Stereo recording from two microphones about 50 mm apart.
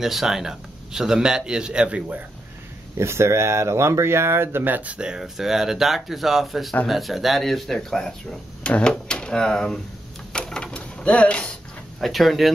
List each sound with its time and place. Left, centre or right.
0.0 s speech: centre; by 2.2 s right
3.0 s speech: right
4.7 s speech: right
5.2 s speech: centre
8.6 s speech: left
10.3 s a sound: centre
11.0 s speech: left
12.0 s speech: centre